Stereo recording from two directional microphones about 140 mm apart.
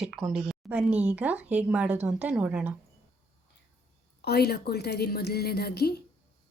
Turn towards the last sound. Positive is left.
turn(degrees=90)